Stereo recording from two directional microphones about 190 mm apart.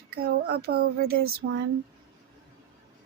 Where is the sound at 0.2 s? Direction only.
55° right (ahead or behind).